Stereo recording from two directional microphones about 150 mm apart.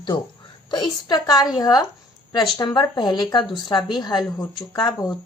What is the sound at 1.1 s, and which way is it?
Speech, 25° left (ahead or behind).